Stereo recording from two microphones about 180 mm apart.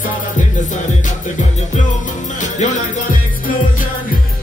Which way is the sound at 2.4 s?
40° left (ahead or behind).